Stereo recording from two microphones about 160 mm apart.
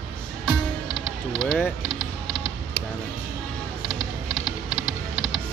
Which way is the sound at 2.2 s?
30° left (ahead or behind).